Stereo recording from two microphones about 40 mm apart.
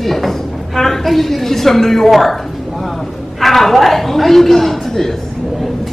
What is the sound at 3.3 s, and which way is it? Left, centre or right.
A woman's voice, centre.